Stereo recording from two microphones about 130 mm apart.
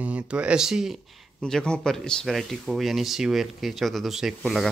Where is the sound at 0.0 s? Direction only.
10° right (ahead or behind).